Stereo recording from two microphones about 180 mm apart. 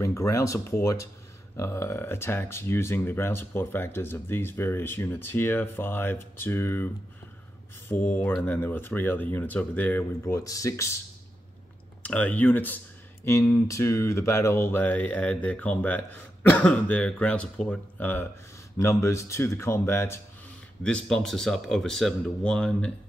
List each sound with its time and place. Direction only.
0.0 s speech: 15° left (ahead or behind)
7.9 s speech: 10° left (ahead or behind)
12.0 s speech: 10° left (ahead or behind)